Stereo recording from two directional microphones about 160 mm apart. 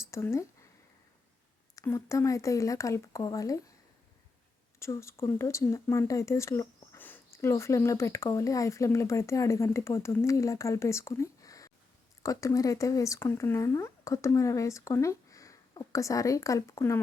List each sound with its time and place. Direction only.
0.0 s speech: 15° left (ahead or behind)
1.7 s speech: 20° left (ahead or behind)
4.8 s speech: 15° left (ahead or behind)